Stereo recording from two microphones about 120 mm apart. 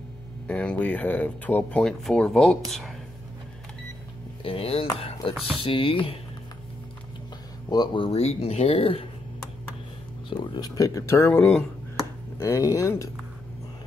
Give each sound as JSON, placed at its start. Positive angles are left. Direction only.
{"t": 0.5, "sound": "speech", "side_deg": 10}
{"t": 4.4, "sound": "speech", "side_deg": 50}
{"t": 7.7, "sound": "speech", "side_deg": 40}
{"t": 8.2, "sound": "speech", "side_deg": 60}
{"t": 10.3, "sound": "speech", "side_deg": 40}